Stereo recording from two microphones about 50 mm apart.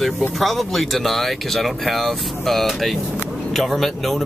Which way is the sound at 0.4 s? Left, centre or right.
Centre.